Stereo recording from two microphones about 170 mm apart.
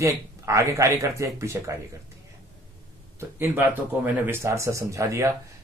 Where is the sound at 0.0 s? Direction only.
20° right (ahead or behind).